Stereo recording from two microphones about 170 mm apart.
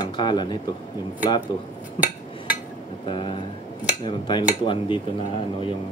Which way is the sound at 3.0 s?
30° left (ahead or behind).